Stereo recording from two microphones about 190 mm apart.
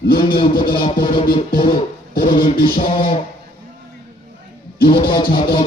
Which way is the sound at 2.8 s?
30° left (ahead or behind).